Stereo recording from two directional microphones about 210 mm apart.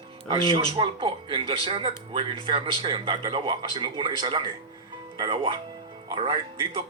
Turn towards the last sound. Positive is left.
turn(degrees=-25)  # may be behind; listen again after turning